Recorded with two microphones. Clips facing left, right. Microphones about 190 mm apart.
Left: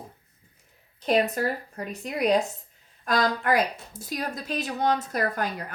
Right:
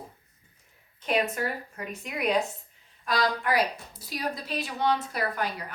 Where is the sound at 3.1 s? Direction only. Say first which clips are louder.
Left 3 dB; 50° left (ahead or behind).